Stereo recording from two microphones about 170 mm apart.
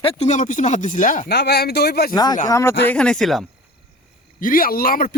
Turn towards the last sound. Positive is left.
turn(degrees=60)  # may be behind; listen again after turning